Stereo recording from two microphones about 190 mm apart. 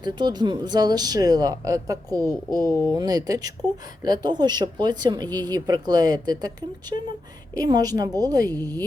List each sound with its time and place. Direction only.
0.0 s speech: 25° right (ahead or behind)
2.6 s speech: 20° left (ahead or behind)
2.9 s speech: 20° right (ahead or behind)